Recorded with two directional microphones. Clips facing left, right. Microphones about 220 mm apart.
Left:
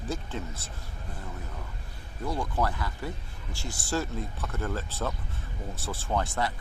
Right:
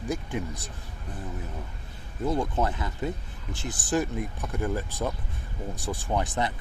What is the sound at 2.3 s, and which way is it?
Speech, 20° right (ahead or behind).